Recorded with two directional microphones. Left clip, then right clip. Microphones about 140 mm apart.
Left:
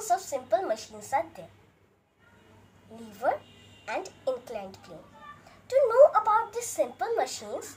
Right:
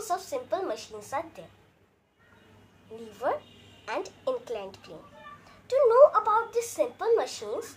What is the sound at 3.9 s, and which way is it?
A woman's voice, 25° right (ahead or behind).